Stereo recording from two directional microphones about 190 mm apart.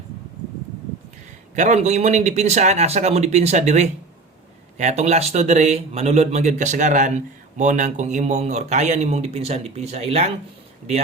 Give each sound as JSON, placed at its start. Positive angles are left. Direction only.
{"t": 1.5, "sound": "speech", "side_deg": -40}